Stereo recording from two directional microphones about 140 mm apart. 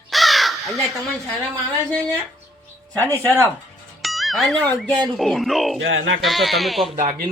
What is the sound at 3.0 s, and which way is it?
Speech, 15° left (ahead or behind).